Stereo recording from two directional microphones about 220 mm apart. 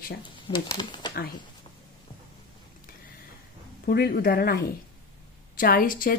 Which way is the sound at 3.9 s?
45° left (ahead or behind).